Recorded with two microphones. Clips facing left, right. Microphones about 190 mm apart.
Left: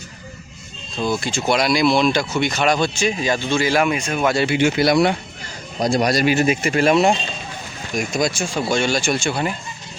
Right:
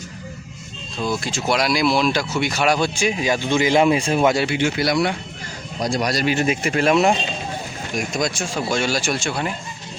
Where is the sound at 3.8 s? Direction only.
30° right (ahead or behind).